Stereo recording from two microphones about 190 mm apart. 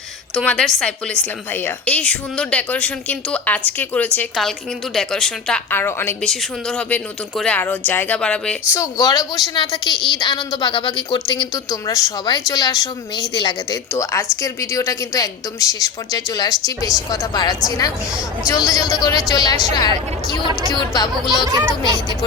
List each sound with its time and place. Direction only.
0.3 s a woman's voice: 5° left (ahead or behind)
8.7 s a woman's voice: 15° left (ahead or behind)
21.5 s speech: 20° right (ahead or behind)